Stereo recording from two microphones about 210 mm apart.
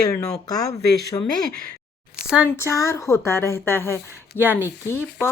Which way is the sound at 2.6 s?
10° left (ahead or behind).